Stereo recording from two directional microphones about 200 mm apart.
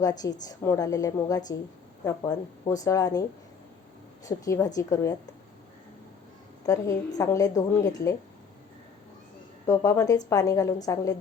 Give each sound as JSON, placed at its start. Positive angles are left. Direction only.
{"t": 0.0, "sound": "a woman's voice", "side_deg": 20}
{"t": 4.3, "sound": "speech", "side_deg": 15}
{"t": 6.7, "sound": "speech", "side_deg": 15}
{"t": 9.6, "sound": "speech", "side_deg": 15}